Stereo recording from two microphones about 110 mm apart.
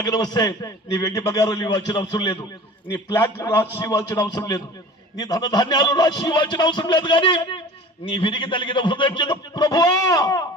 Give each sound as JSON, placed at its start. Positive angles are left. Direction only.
{"t": 0.0, "sound": "a man's voice", "side_deg": 40}
{"t": 3.3, "sound": "a man's voice", "side_deg": 25}